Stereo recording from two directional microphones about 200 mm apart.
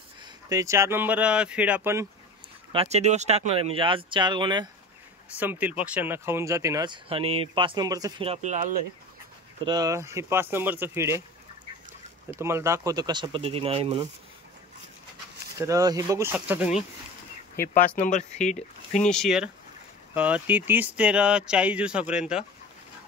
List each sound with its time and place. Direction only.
0.2 s speech: 15° right (ahead or behind)
2.7 s speech: 30° right (ahead or behind)
5.4 s speech: 10° right (ahead or behind)
8.3 s speech: 35° right (ahead or behind)
9.7 s speech: 15° right (ahead or behind)
12.4 s speech: 15° right (ahead or behind); by 14.0 s 30° right (ahead or behind)
15.5 s speech: 15° right (ahead or behind)
17.9 s speech: 35° left (ahead or behind)
19.0 s speech: centre (ahead or behind)